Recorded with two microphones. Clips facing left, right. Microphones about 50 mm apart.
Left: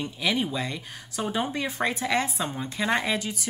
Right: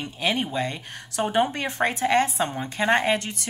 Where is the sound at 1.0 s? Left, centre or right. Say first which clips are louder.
Right 5 dB; right.